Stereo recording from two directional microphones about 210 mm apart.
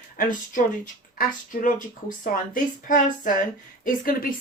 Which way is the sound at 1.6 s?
40° left (ahead or behind).